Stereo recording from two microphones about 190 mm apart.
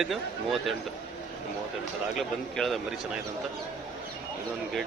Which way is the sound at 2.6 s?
Centre (ahead or behind).